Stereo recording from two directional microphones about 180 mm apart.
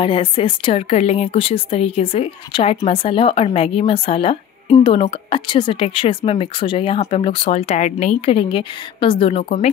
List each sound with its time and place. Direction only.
0.0 s speech: 30° left (ahead or behind)